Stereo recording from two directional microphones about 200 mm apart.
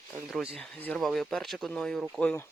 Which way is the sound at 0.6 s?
5° left (ahead or behind).